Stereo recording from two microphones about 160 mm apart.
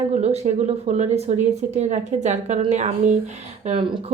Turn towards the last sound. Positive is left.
turn(degrees=-40)  # may be behind; listen again after turning